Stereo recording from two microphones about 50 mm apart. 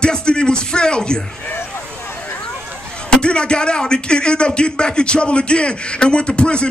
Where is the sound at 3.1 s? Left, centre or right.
Centre.